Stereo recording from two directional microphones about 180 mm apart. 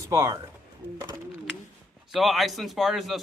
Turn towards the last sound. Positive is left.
turn(degrees=0)  # may be behind; listen again after turning